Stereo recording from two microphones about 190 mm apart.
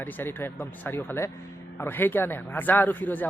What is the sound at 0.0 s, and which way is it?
Speech, 10° left (ahead or behind).